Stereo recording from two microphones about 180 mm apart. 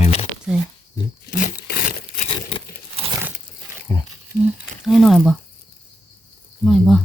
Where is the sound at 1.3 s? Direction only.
40° left (ahead or behind).